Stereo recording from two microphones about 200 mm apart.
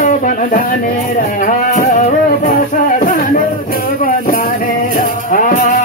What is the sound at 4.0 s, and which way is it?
Music, 45° left (ahead or behind).